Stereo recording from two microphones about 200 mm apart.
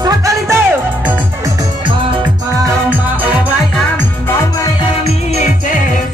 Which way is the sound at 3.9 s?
10° left (ahead or behind).